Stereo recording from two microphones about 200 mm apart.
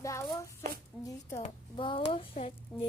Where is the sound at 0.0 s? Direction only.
15° left (ahead or behind).